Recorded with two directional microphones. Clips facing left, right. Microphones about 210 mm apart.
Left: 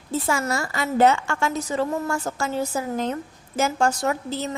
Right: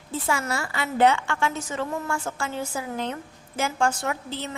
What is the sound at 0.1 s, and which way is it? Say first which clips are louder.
A woman's voice: left 3 dB; 40° left (ahead or behind).